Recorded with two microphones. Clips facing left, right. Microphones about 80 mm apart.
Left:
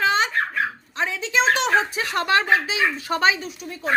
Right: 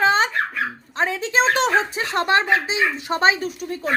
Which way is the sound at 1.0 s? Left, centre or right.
Right.